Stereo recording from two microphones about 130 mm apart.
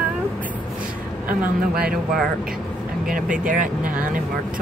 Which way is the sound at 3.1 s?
90° right.